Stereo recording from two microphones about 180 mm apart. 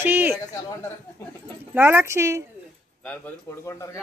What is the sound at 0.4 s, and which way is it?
Speech, 15° left (ahead or behind).